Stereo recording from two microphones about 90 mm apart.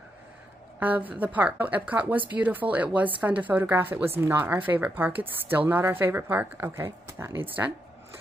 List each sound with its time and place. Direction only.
0.7 s speech: 20° right (ahead or behind)